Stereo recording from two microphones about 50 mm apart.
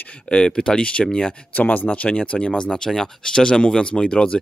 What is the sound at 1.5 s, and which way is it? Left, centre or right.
Speech, left.